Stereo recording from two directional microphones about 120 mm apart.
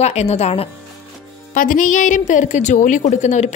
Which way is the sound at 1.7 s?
90° left.